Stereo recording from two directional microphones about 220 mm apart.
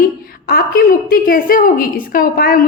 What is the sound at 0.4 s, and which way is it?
A woman's voice, 45° left (ahead or behind).